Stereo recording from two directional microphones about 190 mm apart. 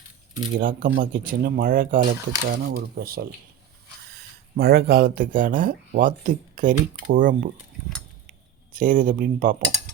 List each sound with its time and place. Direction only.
0.6 s speech: 45° right (ahead or behind)
8.7 s speech: 45° right (ahead or behind)